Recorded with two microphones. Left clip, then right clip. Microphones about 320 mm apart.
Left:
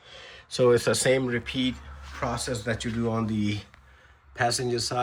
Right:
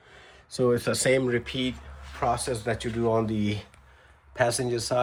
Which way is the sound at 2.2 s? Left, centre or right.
Centre.